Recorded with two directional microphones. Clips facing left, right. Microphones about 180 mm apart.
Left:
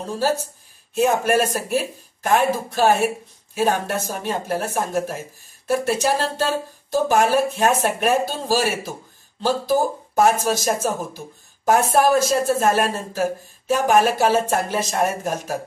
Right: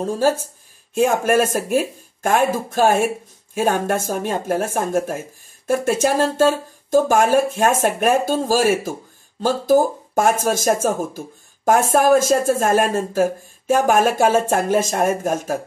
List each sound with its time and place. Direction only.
0.9 s speech: 45° right (ahead or behind)